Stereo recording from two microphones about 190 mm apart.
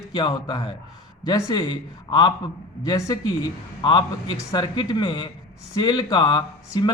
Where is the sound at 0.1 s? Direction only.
25° left (ahead or behind).